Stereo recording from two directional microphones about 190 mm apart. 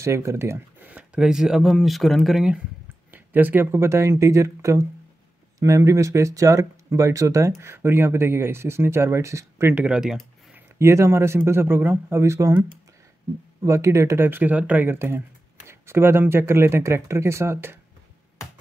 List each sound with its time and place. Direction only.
0.0 s speech: 15° right (ahead or behind)
10.8 s speech: 15° right (ahead or behind)
13.7 s speech: 15° right (ahead or behind)